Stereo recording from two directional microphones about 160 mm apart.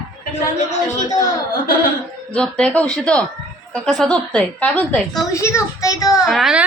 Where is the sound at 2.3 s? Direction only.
5° left (ahead or behind).